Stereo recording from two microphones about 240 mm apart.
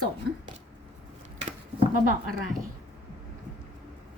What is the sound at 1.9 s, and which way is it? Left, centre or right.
Speech, right.